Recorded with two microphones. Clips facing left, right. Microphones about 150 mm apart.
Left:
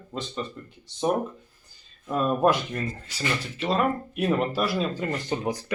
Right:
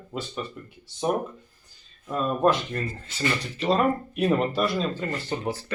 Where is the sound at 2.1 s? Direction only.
10° left (ahead or behind).